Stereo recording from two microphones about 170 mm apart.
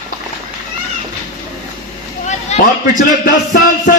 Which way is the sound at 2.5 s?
40° left (ahead or behind).